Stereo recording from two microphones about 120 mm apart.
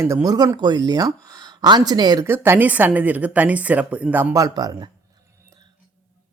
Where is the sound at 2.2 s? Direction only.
20° right (ahead or behind).